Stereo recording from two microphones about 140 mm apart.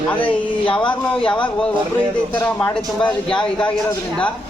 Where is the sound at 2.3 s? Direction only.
10° left (ahead or behind).